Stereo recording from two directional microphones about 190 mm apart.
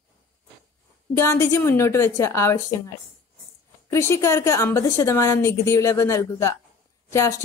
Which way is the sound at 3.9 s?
15° left (ahead or behind).